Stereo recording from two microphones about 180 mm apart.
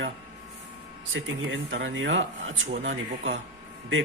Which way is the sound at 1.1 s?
90° right.